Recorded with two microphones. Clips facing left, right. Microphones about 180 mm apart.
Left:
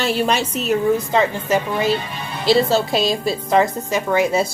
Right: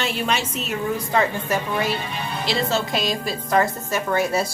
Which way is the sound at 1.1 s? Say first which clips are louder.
Left 4 dB; 20° left (ahead or behind).